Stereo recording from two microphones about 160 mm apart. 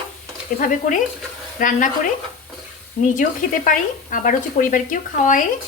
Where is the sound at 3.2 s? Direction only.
55° left (ahead or behind).